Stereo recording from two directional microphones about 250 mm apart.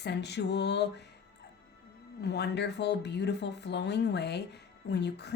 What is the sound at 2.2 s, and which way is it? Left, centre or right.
Speech, left.